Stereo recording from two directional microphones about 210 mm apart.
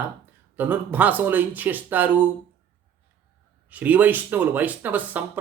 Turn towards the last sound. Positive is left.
turn(degrees=-10)  # may be behind; listen again after turning